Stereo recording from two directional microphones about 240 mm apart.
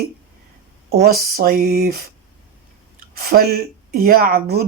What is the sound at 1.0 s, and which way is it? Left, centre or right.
Speech, right.